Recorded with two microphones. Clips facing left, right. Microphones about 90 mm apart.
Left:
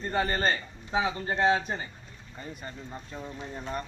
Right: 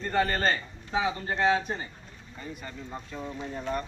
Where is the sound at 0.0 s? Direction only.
20° left (ahead or behind).